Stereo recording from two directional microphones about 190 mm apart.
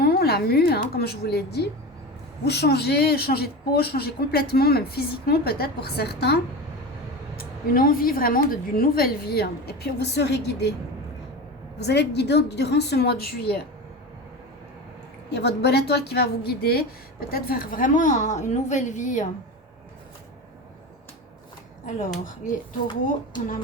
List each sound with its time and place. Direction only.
0.0 s a woman's voice: 55° left (ahead or behind)
11.8 s a woman's voice: 60° left (ahead or behind)
15.3 s a woman's voice: 60° left (ahead or behind); by 19.3 s 40° left (ahead or behind)
21.8 s speech: 45° left (ahead or behind)